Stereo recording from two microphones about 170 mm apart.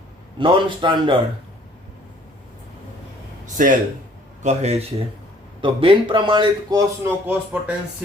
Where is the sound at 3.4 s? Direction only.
50° right (ahead or behind).